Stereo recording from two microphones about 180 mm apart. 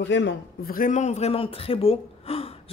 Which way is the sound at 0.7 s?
45° left (ahead or behind).